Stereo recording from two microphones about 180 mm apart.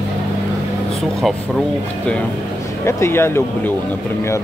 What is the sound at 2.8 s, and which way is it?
Speech, 15° left (ahead or behind).